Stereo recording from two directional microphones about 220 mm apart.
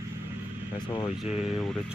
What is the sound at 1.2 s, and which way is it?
Speech, 5° right (ahead or behind).